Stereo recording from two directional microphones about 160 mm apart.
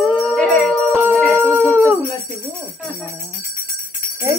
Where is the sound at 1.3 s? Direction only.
15° right (ahead or behind).